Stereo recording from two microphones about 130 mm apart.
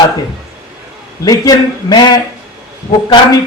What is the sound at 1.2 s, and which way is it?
A man's voice, 30° left (ahead or behind).